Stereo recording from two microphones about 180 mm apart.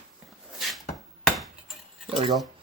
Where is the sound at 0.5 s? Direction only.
Centre (ahead or behind).